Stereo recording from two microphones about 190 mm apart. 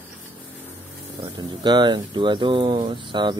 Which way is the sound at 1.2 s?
25° right (ahead or behind).